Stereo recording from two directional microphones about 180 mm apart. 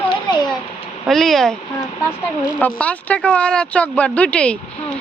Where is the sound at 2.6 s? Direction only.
10° left (ahead or behind).